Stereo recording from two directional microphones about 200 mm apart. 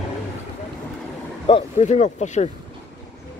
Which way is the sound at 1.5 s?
35° left (ahead or behind).